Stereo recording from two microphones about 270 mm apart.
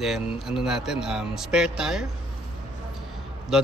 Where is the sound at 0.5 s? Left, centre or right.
Centre.